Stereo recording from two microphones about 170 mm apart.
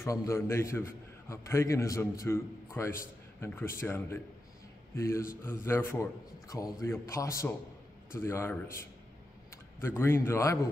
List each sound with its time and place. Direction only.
0.0 s a man's voice: 15° left (ahead or behind)